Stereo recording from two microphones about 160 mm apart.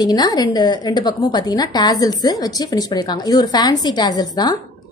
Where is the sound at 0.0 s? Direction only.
25° left (ahead or behind).